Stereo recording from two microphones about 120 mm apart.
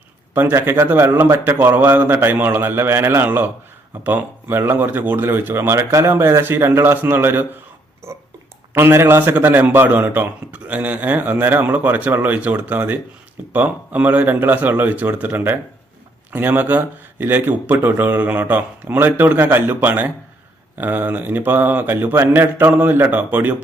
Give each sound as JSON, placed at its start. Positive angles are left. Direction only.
{"t": 0.3, "sound": "a man's voice", "side_deg": -15}
{"t": 8.0, "sound": "burping", "side_deg": -25}
{"t": 8.7, "sound": "a man's voice", "side_deg": -20}